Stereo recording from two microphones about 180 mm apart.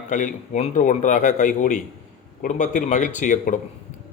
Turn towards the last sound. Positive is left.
turn(degrees=45)  # may be behind; listen again after turning